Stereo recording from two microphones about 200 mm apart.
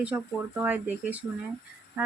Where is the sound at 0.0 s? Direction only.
5° right (ahead or behind).